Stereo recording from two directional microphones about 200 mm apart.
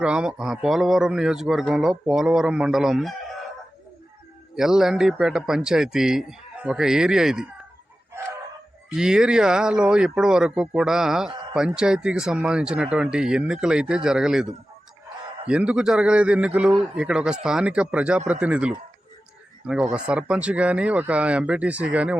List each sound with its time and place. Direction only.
0.0 s a man's voice: 5° right (ahead or behind)
4.5 s a man's voice: centre (ahead or behind)
9.0 s a man's voice: 5° right (ahead or behind)
15.4 s a man's voice: 5° right (ahead or behind)